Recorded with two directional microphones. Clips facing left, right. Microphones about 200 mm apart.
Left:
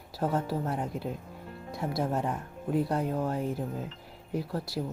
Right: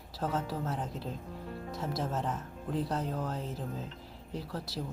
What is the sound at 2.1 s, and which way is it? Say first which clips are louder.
Speech: left 4 dB; 15° left (ahead or behind).